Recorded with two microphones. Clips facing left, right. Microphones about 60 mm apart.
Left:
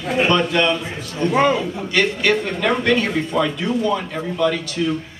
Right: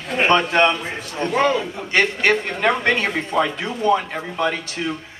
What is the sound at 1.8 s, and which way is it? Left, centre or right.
Speech, right.